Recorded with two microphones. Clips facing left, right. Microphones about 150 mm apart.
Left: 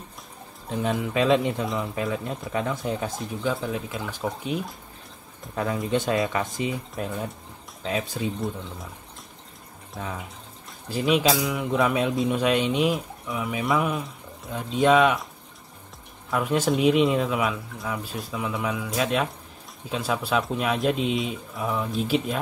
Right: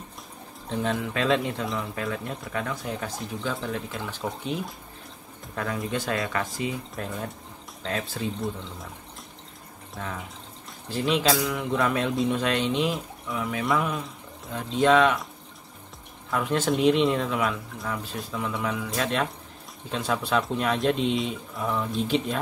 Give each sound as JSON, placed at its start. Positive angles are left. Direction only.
{"t": 0.7, "sound": "speech", "side_deg": 15}
{"t": 3.4, "sound": "speech", "side_deg": 10}
{"t": 5.9, "sound": "speech", "side_deg": 25}
{"t": 9.9, "sound": "speech", "side_deg": 10}
{"t": 16.3, "sound": "speech", "side_deg": 10}